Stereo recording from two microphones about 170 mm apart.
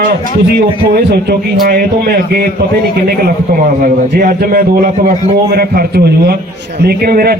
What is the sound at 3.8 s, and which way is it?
A man's voice, 60° right (ahead or behind).